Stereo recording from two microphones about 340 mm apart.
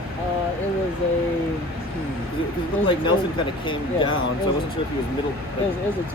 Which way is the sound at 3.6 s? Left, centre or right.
Centre.